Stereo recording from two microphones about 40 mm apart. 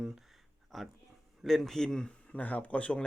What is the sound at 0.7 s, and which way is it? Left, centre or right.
A man's voice, centre.